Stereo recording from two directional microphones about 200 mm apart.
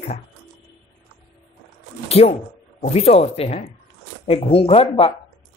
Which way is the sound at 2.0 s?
30° left (ahead or behind).